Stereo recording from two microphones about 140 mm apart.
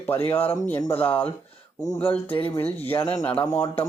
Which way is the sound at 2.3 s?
40° left (ahead or behind).